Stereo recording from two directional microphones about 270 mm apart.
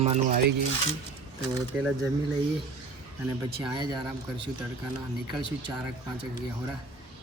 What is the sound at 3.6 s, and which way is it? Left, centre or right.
Speech, centre.